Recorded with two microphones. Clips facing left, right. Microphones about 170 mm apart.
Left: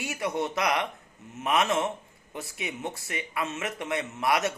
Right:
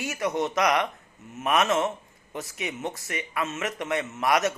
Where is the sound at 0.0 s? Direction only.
15° left (ahead or behind).